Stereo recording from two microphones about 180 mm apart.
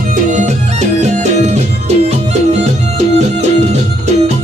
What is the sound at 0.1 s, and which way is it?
Music, 45° right (ahead or behind).